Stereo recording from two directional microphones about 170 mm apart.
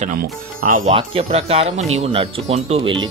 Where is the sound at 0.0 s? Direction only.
55° right (ahead or behind).